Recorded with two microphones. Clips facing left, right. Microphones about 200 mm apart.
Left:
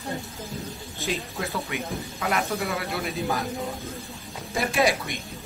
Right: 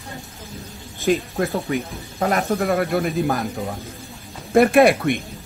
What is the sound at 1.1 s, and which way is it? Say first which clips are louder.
A man's voice: right 10 dB; 40° right (ahead or behind).